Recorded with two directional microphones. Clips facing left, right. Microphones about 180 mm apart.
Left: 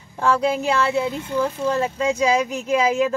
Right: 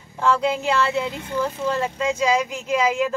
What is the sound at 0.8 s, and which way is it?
Speech, 15° left (ahead or behind).